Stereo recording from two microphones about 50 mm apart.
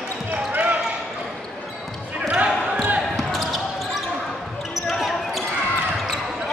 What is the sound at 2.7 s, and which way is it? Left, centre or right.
Basketball bounce, right.